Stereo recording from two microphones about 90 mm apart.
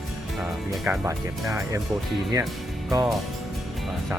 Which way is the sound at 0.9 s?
30° right (ahead or behind).